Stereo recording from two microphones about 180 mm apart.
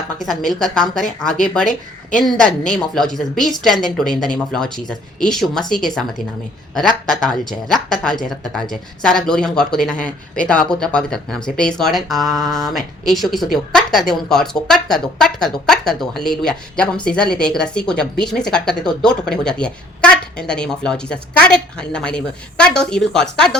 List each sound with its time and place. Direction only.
0.2 s speech: centre (ahead or behind)
1.6 s speech: 45° left (ahead or behind)
2.2 s speech: 5° left (ahead or behind)